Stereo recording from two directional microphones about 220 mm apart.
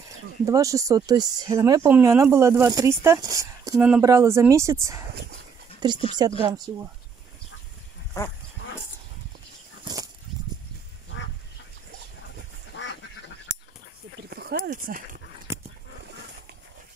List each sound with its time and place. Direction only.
0.5 s speech: 15° right (ahead or behind)
5.8 s speech: 20° right (ahead or behind)
8.2 s speech: 15° left (ahead or behind)
14.3 s speech: 45° right (ahead or behind)
15.5 s dog: 10° right (ahead or behind)